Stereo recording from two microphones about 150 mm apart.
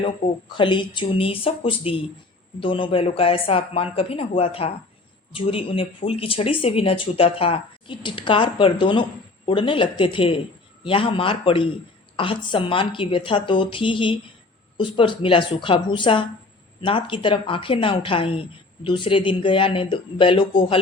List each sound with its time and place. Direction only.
0.5 s speech: 30° left (ahead or behind)